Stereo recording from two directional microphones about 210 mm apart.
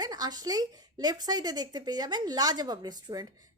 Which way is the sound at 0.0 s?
20° right (ahead or behind).